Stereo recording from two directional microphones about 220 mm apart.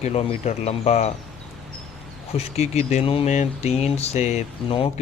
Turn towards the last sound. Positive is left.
turn(degrees=25)  # may be behind; listen again after turning